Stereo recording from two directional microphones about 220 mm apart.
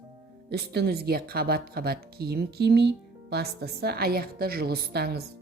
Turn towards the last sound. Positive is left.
turn(degrees=-45)  # may be behind; listen again after turning